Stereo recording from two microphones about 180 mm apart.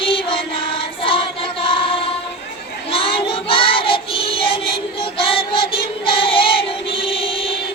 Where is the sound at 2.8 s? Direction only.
30° left (ahead or behind).